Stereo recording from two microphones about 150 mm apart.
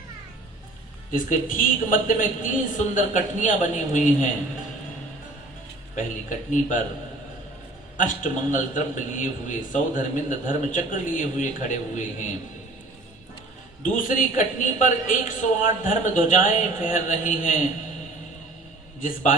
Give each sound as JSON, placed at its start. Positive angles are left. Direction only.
{"t": 1.1, "sound": "a man's voice", "side_deg": 65}
{"t": 6.0, "sound": "a man's voice", "side_deg": 60}
{"t": 7.9, "sound": "a man's voice", "side_deg": 60}
{"t": 13.9, "sound": "a man's voice", "side_deg": 60}
{"t": 19.0, "sound": "a man's voice", "side_deg": 65}